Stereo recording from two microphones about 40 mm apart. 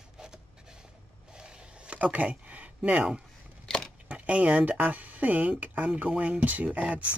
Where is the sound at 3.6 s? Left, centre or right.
Centre.